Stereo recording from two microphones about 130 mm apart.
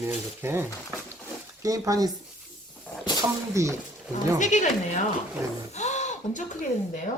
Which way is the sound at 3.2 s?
25° right (ahead or behind).